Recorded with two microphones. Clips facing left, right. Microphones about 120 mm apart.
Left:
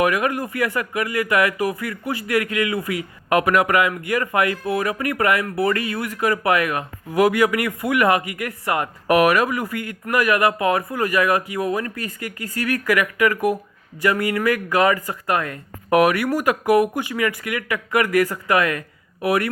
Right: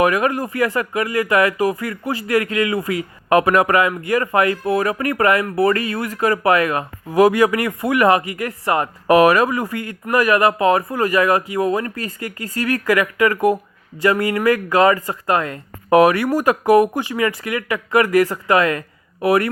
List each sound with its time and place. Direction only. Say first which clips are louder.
0.0 s speech: right 3 dB; 35° right (ahead or behind)